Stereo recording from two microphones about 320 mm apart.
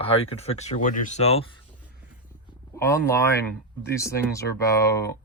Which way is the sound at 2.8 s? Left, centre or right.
Centre.